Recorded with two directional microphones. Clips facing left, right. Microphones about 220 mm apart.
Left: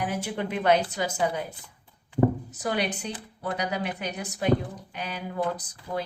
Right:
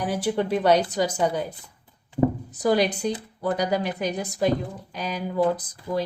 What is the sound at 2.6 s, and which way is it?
A woman's voice, 40° right (ahead or behind).